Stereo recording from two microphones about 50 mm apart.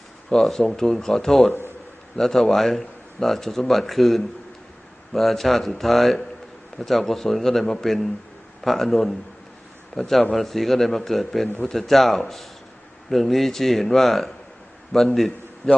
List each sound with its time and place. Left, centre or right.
0.3 s a man's voice: centre